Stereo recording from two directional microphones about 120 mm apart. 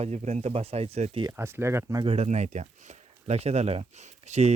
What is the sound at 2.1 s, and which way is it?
Speech, 65° right (ahead or behind).